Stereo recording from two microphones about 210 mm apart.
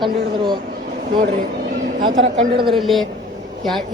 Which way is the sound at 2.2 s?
25° right (ahead or behind).